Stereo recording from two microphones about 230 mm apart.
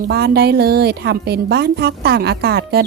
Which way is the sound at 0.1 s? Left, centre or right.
Right.